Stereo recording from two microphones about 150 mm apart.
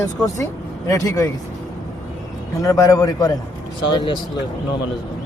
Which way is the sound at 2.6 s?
20° left (ahead or behind).